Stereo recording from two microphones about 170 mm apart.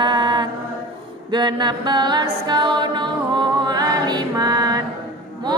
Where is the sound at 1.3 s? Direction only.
25° right (ahead or behind).